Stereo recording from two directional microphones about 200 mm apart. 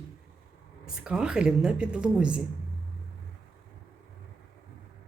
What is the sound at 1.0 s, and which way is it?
Speech, 5° right (ahead or behind).